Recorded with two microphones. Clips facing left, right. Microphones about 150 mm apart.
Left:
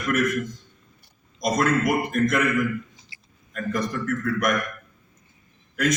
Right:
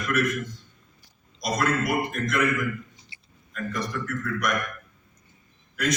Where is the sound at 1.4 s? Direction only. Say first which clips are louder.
Left 4 dB; 50° left (ahead or behind).